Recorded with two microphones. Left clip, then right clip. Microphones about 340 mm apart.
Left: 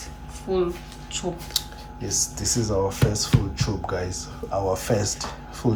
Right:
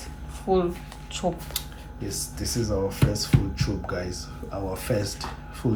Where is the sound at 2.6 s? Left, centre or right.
Centre.